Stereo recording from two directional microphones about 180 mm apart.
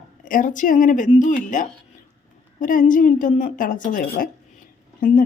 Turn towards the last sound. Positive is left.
turn(degrees=50)  # may be behind; listen again after turning